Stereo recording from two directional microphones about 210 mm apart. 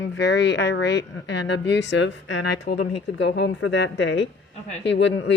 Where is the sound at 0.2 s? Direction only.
55° left (ahead or behind).